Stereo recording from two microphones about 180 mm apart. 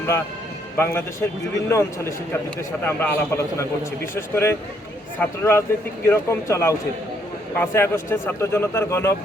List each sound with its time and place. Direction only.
0.8 s a man's voice: 10° left (ahead or behind)